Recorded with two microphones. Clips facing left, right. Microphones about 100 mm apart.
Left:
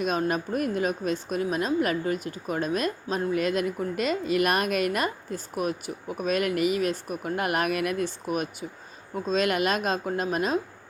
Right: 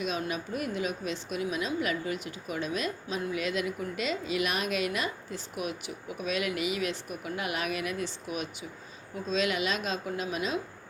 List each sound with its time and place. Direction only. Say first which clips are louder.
0.0 s a woman's voice: left 6 dB; 45° left (ahead or behind)